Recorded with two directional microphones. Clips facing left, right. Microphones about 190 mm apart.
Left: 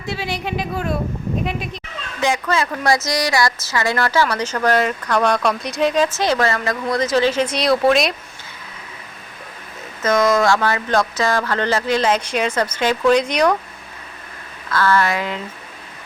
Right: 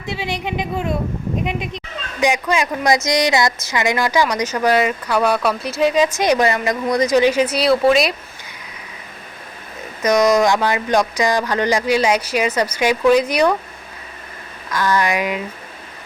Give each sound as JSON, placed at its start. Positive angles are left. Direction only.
{"t": 0.1, "sound": "a woman's voice", "side_deg": -20}
{"t": 10.0, "sound": "speech", "side_deg": -15}
{"t": 14.7, "sound": "speech", "side_deg": -15}